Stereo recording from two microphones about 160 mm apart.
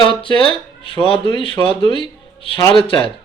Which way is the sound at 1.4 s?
30° left (ahead or behind).